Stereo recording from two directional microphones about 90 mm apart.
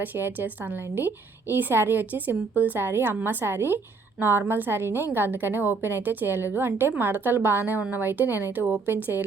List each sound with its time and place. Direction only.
0.0 s a woman's voice: 25° right (ahead or behind)